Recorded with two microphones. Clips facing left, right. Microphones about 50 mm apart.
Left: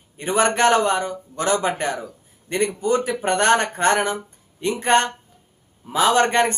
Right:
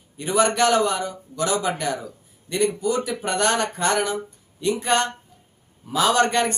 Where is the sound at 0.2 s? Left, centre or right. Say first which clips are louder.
Left 1 dB; left.